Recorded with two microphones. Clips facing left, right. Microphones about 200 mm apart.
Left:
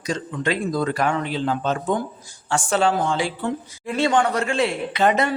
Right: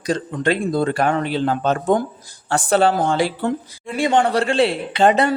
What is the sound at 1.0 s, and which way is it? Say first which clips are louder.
Speech: right 3 dB; 55° right (ahead or behind).